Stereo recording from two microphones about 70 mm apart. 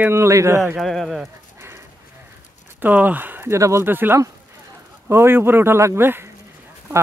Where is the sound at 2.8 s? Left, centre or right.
Right.